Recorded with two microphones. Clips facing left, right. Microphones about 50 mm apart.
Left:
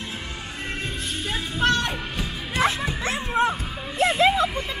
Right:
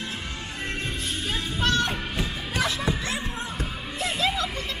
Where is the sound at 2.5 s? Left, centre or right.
Left.